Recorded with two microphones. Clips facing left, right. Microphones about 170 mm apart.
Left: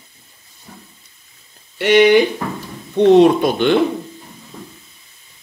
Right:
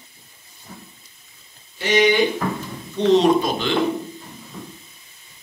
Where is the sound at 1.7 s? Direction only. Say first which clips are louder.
Left 6 dB; 65° left (ahead or behind).